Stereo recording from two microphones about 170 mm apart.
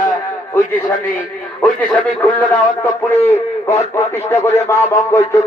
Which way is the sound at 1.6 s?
10° left (ahead or behind).